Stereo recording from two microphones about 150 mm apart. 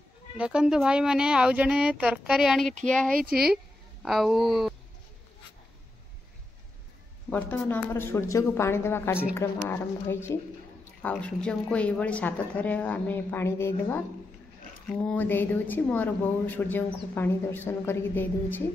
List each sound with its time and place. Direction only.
0.4 s a woman's voice: 5° right (ahead or behind)
7.2 s speech: 10° left (ahead or behind)